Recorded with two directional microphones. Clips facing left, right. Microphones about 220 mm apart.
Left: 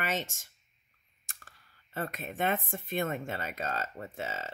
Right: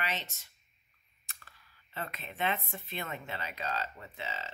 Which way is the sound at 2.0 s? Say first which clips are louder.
Left 4 dB; 50° left (ahead or behind).